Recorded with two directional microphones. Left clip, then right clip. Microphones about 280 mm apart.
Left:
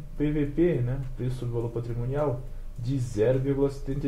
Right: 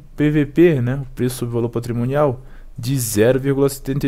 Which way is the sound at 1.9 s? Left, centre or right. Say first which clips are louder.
Right 13 dB; right.